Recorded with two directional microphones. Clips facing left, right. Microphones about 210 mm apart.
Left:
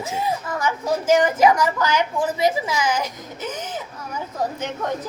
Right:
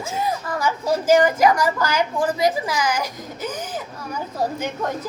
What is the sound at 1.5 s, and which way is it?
A woman's voice, 20° left (ahead or behind).